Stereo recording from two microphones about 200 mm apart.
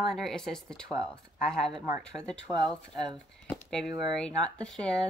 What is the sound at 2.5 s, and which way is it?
Speech, 20° right (ahead or behind).